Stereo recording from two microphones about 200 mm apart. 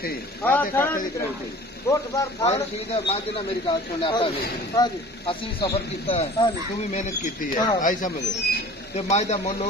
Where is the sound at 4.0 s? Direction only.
25° left (ahead or behind).